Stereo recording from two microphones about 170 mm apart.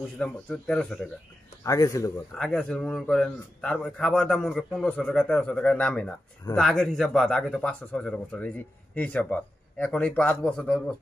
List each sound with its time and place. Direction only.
0.2 s a man's voice: 5° left (ahead or behind)
1.6 s speech: 20° left (ahead or behind)
2.3 s a man's voice: 5° left (ahead or behind)